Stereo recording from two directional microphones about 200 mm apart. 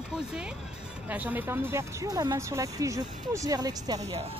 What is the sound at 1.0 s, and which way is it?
Speech, 10° right (ahead or behind).